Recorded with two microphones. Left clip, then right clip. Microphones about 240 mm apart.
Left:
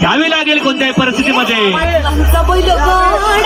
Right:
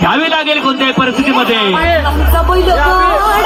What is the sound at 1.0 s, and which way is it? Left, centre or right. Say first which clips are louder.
Speech: even; left.